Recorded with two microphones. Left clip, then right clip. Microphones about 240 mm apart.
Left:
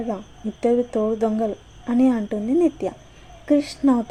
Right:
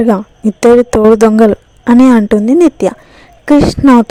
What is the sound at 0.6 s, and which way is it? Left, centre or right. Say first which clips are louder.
Speech: right 14 dB; right.